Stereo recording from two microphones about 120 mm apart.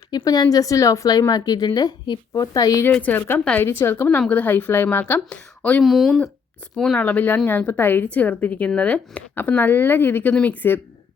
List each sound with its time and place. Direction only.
0.1 s a woman's voice: 35° left (ahead or behind)
2.8 s a woman's voice: 15° left (ahead or behind)
5.8 s a woman's voice: centre (ahead or behind); by 10.8 s 15° left (ahead or behind)